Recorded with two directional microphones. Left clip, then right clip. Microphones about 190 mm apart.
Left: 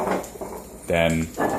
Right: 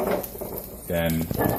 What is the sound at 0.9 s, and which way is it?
Speech, 30° left (ahead or behind).